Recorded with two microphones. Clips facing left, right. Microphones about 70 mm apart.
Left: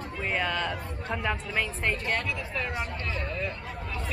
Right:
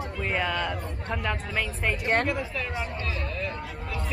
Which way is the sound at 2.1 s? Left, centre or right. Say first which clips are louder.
Right 5 dB; right.